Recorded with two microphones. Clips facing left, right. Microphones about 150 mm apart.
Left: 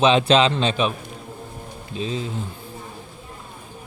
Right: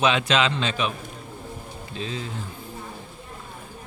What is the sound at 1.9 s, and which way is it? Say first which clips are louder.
Speech: left 5 dB; 20° left (ahead or behind).